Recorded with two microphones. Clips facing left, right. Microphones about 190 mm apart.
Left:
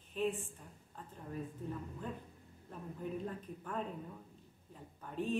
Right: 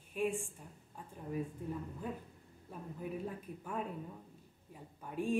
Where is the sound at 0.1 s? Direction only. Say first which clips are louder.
Right 1 dB; 10° right (ahead or behind).